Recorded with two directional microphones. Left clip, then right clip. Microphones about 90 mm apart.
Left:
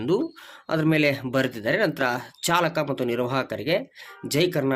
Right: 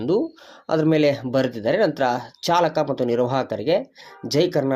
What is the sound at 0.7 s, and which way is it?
Speech, 30° right (ahead or behind).